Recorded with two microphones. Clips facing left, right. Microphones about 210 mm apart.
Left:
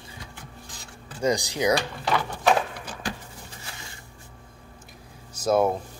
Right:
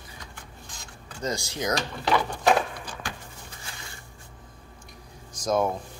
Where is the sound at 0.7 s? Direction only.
35° left (ahead or behind).